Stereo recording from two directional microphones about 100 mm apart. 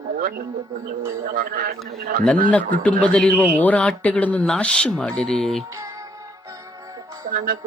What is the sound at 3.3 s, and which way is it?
Speech, 15° right (ahead or behind).